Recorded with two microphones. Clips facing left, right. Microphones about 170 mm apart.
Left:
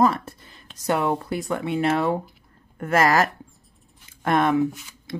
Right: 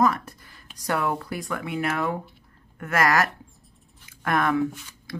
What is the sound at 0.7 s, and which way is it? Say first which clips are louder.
Speech: left 3 dB; 25° left (ahead or behind).